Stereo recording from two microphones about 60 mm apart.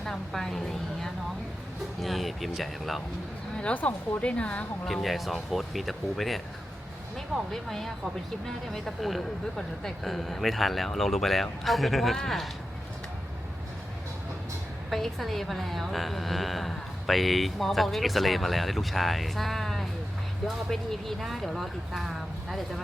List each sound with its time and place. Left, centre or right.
0.0 s music: centre
2.0 s a woman's voice: centre
3.6 s a woman's voice: left
4.9 s a woman's voice: centre
7.5 s a woman's voice: centre
14.8 s a woman's voice: centre